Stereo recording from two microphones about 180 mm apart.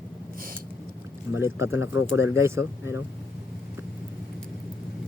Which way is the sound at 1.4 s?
15° right (ahead or behind).